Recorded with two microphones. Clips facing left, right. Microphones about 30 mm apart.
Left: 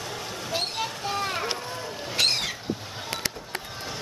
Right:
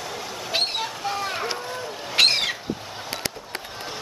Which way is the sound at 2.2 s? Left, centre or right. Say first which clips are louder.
Right 5 dB; right.